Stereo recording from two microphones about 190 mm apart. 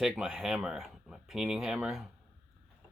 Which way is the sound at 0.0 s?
Centre (ahead or behind).